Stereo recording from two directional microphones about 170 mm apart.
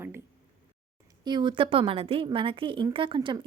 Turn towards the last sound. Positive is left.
turn(degrees=-30)  # may be behind; listen again after turning